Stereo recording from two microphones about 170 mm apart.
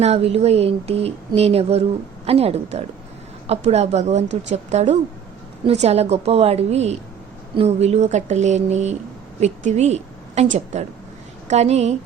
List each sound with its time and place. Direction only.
0.0 s a woman's voice: 40° right (ahead or behind)